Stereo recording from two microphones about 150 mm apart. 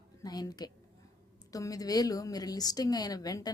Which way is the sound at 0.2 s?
25° left (ahead or behind).